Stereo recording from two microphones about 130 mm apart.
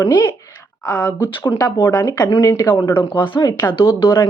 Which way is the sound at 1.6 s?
35° left (ahead or behind).